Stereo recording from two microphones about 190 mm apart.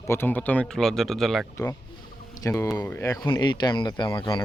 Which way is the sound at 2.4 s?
15° left (ahead or behind).